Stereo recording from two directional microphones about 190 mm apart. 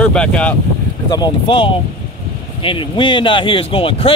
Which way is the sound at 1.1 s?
25° left (ahead or behind).